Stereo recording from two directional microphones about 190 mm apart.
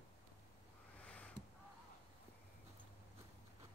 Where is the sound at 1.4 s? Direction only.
20° right (ahead or behind).